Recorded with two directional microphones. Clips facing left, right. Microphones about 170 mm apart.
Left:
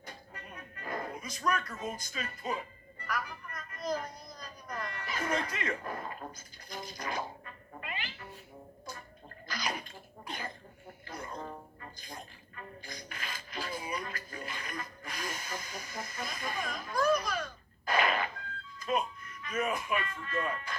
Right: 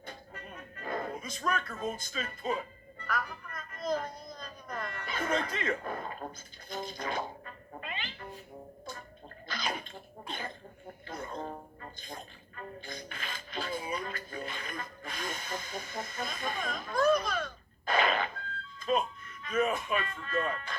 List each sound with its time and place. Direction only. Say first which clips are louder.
0.8 s a woman's voice: right 3 dB; 25° right (ahead or behind)
7.7 s cat: right 1 dB; 25° right (ahead or behind)
9.5 s bathtub: right 1 dB; 25° right (ahead or behind)
10.2 s speech: right 1 dB; 25° right (ahead or behind)
17.8 s a sound: right 1 dB; 25° right (ahead or behind)
18.8 s speech: right 2 dB; 25° right (ahead or behind)